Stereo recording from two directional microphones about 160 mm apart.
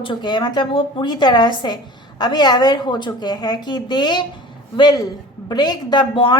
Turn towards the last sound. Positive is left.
turn(degrees=30)  # may be behind; listen again after turning